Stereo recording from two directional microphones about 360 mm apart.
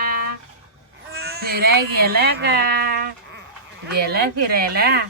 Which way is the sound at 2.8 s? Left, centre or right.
Right.